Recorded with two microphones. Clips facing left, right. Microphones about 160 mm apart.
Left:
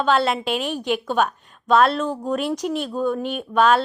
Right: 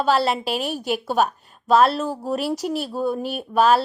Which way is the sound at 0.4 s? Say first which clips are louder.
Left 1 dB; 40° right (ahead or behind).